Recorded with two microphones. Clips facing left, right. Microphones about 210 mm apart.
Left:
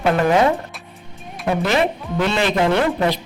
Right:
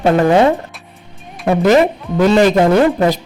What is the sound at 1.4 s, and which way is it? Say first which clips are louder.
A man's voice: right 7 dB; 45° right (ahead or behind).